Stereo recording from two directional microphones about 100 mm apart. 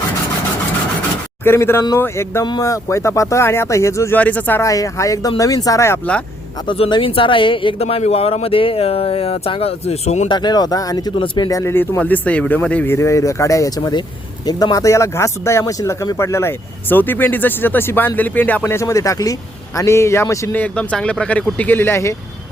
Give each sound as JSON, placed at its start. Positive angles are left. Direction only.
{"t": 1.5, "sound": "speech", "side_deg": 25}
{"t": 2.4, "sound": "speech", "side_deg": 35}
{"t": 4.2, "sound": "speech", "side_deg": 15}
{"t": 4.6, "sound": "a man's voice", "side_deg": 35}
{"t": 6.9, "sound": "speech", "side_deg": 60}
{"t": 10.2, "sound": "a man's voice", "side_deg": 45}
{"t": 11.7, "sound": "speech", "side_deg": 20}
{"t": 12.9, "sound": "a man's voice", "side_deg": 30}
{"t": 18.7, "sound": "a man's voice", "side_deg": 30}
{"t": 20.5, "sound": "speech", "side_deg": 15}